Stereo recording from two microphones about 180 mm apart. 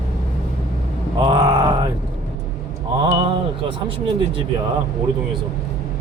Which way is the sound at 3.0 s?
25° right (ahead or behind).